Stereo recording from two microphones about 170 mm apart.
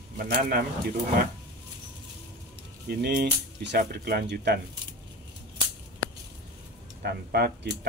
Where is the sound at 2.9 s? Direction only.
70° right (ahead or behind).